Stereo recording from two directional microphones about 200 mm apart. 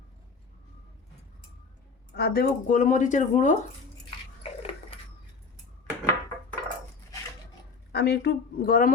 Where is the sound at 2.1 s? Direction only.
50° left (ahead or behind).